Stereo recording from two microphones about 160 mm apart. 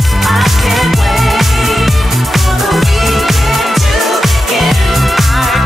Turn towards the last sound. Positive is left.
turn(degrees=0)  # may be behind; listen again after turning